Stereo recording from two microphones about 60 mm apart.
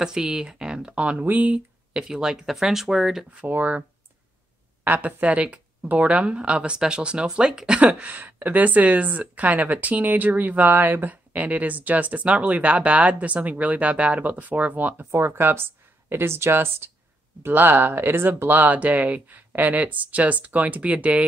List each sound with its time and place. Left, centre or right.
0.0 s speech: centre
2.0 s speech: centre
3.3 s speech: right
4.8 s speech: right
15.0 s speech: right